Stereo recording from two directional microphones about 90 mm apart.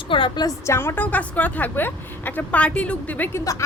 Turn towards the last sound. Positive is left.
turn(degrees=35)  # may be behind; listen again after turning